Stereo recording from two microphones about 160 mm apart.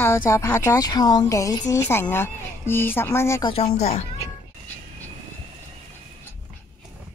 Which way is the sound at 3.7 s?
40° left (ahead or behind).